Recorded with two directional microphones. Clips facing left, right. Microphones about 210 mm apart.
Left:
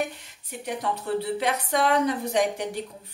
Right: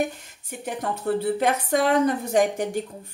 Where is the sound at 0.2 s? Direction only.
50° right (ahead or behind).